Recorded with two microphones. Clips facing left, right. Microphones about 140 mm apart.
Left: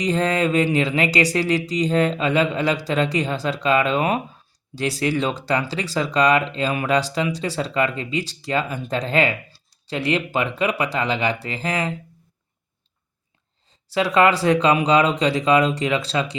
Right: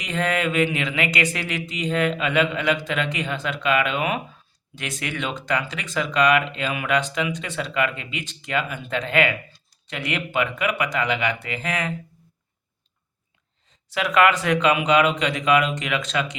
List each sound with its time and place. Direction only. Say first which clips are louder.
0.0 s speech: left 4 dB; 35° left (ahead or behind)
13.7 s speech: left 4 dB; 30° left (ahead or behind)